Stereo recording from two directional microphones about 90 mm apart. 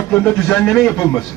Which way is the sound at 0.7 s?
10° left (ahead or behind).